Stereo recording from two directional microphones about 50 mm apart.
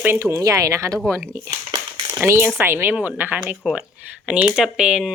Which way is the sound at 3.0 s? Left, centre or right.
Right.